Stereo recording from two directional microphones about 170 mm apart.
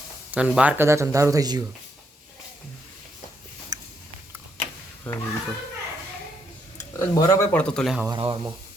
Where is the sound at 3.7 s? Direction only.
25° right (ahead or behind).